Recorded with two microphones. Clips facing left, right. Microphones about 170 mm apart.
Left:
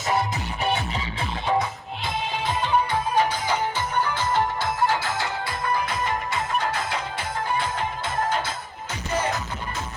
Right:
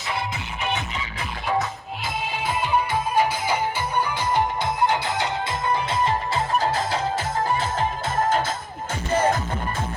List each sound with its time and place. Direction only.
0.1 s music: 40° left (ahead or behind)
3.2 s music: 10° right (ahead or behind); by 7.9 s 35° right (ahead or behind)
8.3 s music: 50° right (ahead or behind)